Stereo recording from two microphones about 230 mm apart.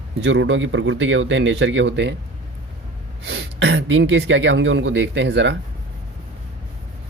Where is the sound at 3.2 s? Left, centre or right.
Right.